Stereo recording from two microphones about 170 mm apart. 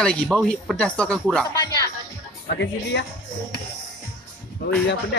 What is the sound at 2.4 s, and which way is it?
Speech, 75° left (ahead or behind).